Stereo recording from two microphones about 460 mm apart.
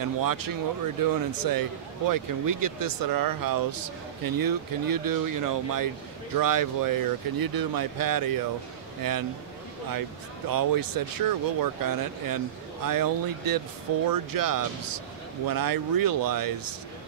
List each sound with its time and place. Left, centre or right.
0.0 s speech: right
10.5 s speech: right